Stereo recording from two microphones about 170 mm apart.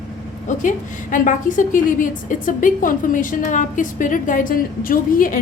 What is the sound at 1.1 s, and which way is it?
A woman's voice, 50° left (ahead or behind).